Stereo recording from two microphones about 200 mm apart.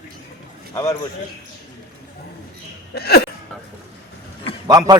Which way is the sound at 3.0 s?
50° left (ahead or behind).